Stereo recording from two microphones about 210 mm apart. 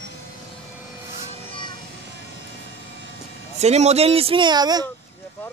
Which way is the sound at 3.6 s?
30° right (ahead or behind).